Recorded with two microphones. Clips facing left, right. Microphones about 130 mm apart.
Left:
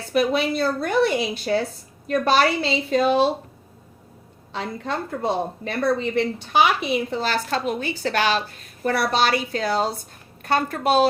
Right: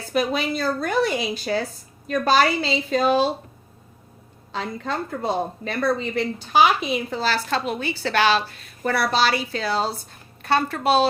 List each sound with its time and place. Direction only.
0.1 s a woman's voice: 60° left (ahead or behind)
4.5 s a woman's voice: 55° left (ahead or behind)